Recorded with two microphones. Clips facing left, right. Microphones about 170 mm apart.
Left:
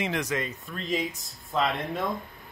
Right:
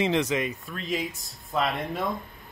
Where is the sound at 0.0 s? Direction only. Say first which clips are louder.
Right 5 dB; 25° right (ahead or behind).